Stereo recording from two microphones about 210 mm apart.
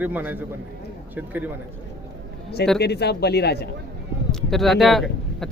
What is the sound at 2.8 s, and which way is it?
Speech, 50° left (ahead or behind).